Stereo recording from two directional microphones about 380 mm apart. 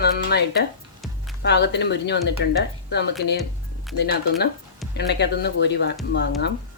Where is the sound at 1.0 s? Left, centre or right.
Centre.